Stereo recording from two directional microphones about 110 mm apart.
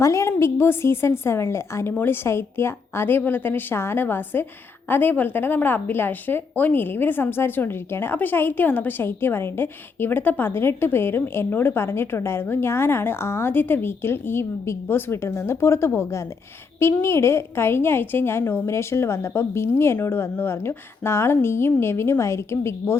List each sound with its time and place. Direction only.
0.0 s a woman's voice: 30° left (ahead or behind)